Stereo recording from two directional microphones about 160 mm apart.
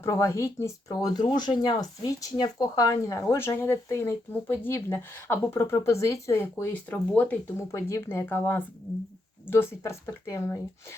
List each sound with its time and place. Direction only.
0.0 s speech: 20° left (ahead or behind)
6.9 s speech: 10° left (ahead or behind)
7.7 s speech: 20° left (ahead or behind)